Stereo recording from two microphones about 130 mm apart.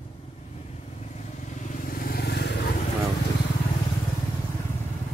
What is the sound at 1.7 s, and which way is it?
Vehicle, 90° left.